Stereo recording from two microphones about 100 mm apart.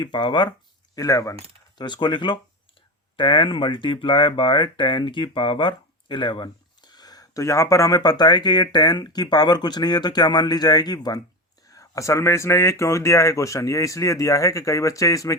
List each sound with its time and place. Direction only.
0.0 s speech: 50° left (ahead or behind)
0.9 s speech: 35° left (ahead or behind)
1.8 s speech: 50° left (ahead or behind)